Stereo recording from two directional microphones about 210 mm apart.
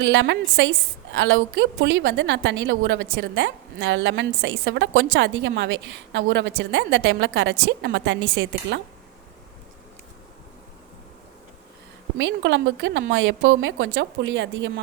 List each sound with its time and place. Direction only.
0.0 s a woman's voice: 60° right (ahead or behind)
12.1 s a woman's voice: 60° right (ahead or behind)